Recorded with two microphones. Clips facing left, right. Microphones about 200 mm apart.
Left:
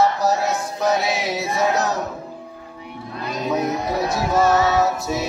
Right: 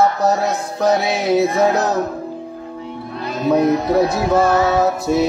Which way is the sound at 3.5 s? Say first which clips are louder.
Right 8 dB; 60° right (ahead or behind).